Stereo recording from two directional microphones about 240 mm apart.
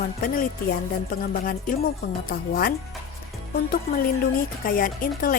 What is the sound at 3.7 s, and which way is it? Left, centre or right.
A woman's voice, left.